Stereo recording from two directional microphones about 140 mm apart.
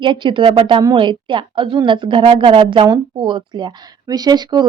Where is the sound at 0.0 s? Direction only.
35° right (ahead or behind).